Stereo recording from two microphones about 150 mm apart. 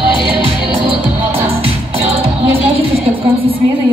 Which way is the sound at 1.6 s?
40° right (ahead or behind).